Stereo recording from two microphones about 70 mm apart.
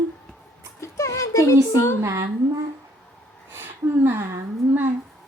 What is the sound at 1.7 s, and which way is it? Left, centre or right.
Speech, left.